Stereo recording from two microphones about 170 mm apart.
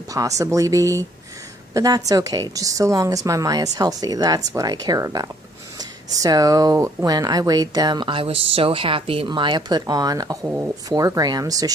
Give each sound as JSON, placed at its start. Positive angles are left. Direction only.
{"t": 0.1, "sound": "speech", "side_deg": -20}